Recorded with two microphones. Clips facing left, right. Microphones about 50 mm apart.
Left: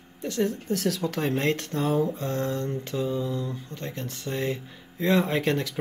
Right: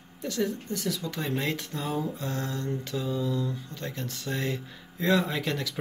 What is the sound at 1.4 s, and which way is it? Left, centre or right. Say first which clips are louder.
Speech: left 5 dB; left.